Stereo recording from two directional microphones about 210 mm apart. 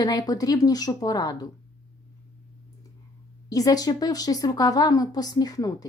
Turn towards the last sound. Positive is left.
turn(degrees=15)  # may be behind; listen again after turning